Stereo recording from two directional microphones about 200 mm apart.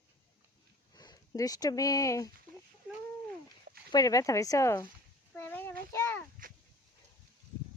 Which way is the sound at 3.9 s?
20° left (ahead or behind).